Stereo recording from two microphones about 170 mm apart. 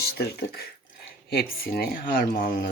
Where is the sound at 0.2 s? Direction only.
70° left (ahead or behind).